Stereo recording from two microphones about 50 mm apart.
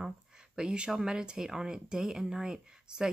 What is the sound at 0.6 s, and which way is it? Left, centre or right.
Speech, centre.